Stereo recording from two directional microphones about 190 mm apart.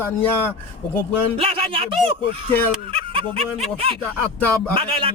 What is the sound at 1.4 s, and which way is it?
A man's voice, 30° right (ahead or behind).